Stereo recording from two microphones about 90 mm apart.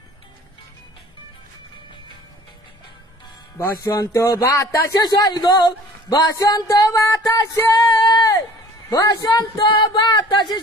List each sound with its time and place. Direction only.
3.5 s speech: 30° left (ahead or behind)
8.0 s a sound: 45° left (ahead or behind)
8.9 s speech: 45° left (ahead or behind)